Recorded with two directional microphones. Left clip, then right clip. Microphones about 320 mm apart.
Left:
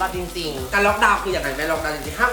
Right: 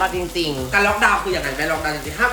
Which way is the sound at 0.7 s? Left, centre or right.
Centre.